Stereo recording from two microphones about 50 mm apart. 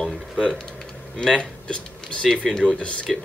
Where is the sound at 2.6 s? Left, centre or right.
Left.